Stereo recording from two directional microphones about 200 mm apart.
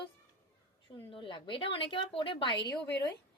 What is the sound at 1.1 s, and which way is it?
A woman's voice, 25° left (ahead or behind).